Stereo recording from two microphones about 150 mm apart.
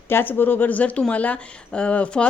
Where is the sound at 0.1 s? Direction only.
15° left (ahead or behind).